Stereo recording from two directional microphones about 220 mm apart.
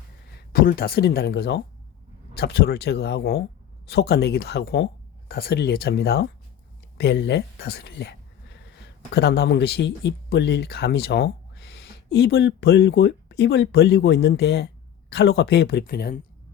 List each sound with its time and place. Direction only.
0.5 s speech: 45° left (ahead or behind)
9.1 s speech: 45° left (ahead or behind)